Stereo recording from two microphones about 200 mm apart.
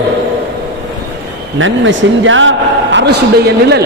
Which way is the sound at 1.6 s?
70° right (ahead or behind).